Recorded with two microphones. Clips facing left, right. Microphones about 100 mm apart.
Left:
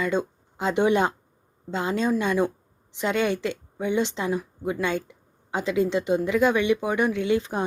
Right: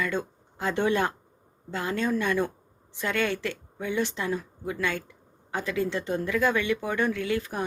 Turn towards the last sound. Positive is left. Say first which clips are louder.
# left 5 dB
turn(degrees=20)  # may be behind; listen again after turning